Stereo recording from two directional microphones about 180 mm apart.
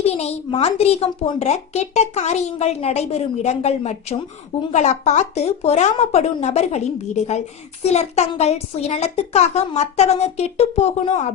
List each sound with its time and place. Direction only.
0.0 s a woman's voice: 35° left (ahead or behind)